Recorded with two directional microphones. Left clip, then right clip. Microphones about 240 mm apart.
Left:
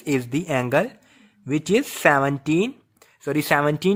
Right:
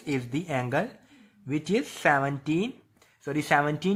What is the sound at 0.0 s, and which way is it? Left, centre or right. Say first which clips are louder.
Speech: left 7 dB; left.